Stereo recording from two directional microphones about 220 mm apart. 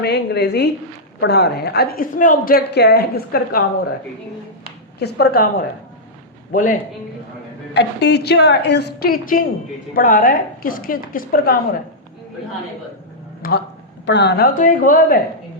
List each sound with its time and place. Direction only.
0.0 s a woman's voice: 50° left (ahead or behind)
4.9 s a woman's voice: 50° left (ahead or behind)
6.5 s a woman's voice: 35° left (ahead or behind)
7.7 s a woman's voice: 50° left (ahead or behind)
13.4 s a woman's voice: 40° left (ahead or behind)